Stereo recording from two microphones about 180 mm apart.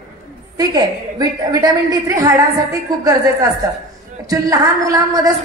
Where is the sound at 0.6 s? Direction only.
20° right (ahead or behind).